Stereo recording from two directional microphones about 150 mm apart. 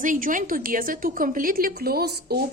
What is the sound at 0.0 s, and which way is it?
A woman's voice, 60° right (ahead or behind).